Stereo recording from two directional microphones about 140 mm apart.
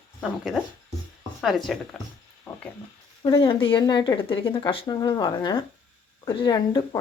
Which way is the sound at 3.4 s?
40° left (ahead or behind).